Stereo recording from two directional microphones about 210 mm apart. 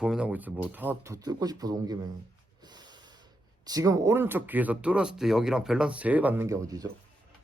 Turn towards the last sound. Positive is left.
turn(degrees=-15)  # may be behind; listen again after turning